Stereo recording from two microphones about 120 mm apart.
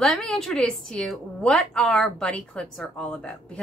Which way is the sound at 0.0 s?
5° left (ahead or behind).